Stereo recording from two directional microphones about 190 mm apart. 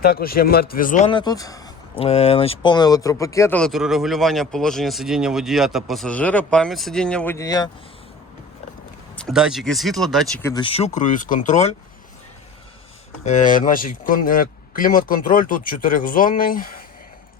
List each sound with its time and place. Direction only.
0.0 s speech: 50° left (ahead or behind)
1.0 s speech: 25° left (ahead or behind)
2.0 s speech: 35° left (ahead or behind); by 3.6 s 15° left (ahead or behind)
3.6 s speech: centre (ahead or behind); by 7.7 s 20° left (ahead or behind)
9.1 s speech: centre (ahead or behind)
10.4 s speech: 25° left (ahead or behind); by 11.7 s 40° left (ahead or behind)
13.2 s speech: 40° left (ahead or behind)